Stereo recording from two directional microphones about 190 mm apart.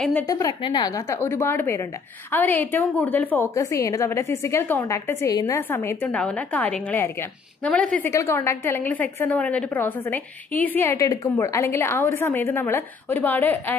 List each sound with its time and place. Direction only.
0.3 s a woman's voice: 20° left (ahead or behind)